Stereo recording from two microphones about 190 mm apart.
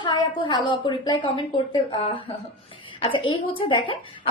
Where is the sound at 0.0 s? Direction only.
25° left (ahead or behind).